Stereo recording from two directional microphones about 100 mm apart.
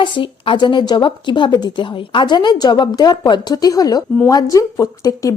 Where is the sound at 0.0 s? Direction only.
55° left (ahead or behind).